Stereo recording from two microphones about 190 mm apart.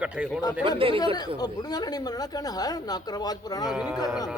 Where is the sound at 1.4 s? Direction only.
20° left (ahead or behind).